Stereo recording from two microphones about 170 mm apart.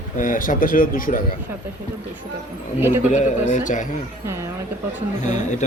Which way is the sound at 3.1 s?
45° left (ahead or behind).